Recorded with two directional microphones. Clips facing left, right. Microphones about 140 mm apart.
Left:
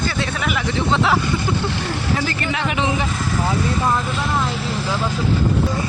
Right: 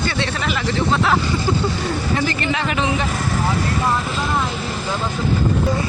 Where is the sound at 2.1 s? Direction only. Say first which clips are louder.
Even; centre (ahead or behind).